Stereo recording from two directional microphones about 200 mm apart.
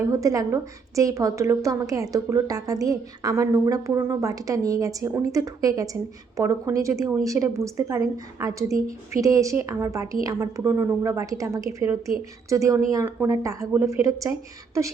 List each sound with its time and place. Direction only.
0.1 s a woman's voice: 15° right (ahead or behind)